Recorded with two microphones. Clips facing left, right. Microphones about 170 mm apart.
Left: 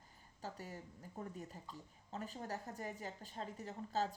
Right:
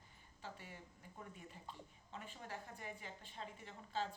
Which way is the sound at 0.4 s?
40° left (ahead or behind).